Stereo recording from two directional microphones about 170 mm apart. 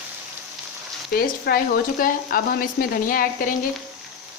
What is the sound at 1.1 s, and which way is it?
Speech, 65° left (ahead or behind).